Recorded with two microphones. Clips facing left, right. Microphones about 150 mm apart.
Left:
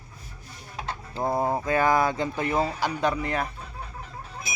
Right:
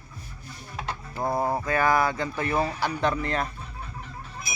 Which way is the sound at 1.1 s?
20° left (ahead or behind).